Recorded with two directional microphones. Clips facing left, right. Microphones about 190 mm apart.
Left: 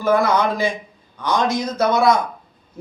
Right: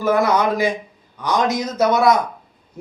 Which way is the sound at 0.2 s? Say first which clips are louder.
Right 1 dB; 15° right (ahead or behind).